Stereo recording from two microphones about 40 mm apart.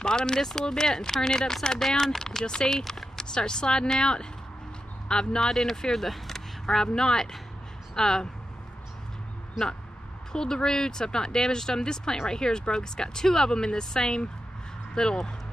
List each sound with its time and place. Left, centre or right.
0.0 s speech: centre
5.4 s speech: centre
10.3 s speech: centre